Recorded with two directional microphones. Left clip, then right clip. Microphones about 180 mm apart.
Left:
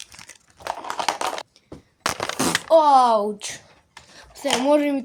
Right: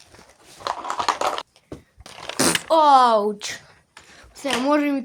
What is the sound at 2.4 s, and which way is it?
Speech, 15° right (ahead or behind).